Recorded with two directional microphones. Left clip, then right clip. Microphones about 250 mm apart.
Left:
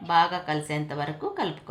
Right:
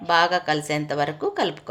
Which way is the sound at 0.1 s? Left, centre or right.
Right.